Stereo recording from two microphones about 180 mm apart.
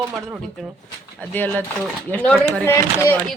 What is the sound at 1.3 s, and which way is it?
Speech, 10° left (ahead or behind).